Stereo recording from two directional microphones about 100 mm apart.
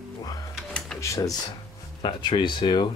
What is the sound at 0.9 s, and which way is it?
Speech, 30° left (ahead or behind).